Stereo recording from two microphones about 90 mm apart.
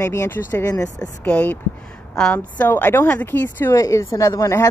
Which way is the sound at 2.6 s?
20° left (ahead or behind).